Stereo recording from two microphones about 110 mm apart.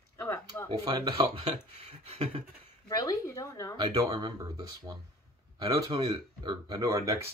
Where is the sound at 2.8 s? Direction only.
35° left (ahead or behind).